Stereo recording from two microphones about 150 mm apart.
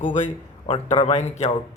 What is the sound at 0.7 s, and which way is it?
Speech, 40° left (ahead or behind).